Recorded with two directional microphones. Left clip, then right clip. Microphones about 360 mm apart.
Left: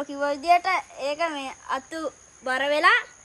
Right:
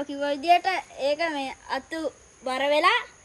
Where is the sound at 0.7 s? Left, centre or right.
Left.